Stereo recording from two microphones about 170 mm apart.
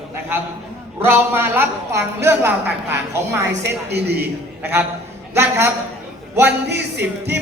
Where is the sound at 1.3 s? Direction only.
15° right (ahead or behind).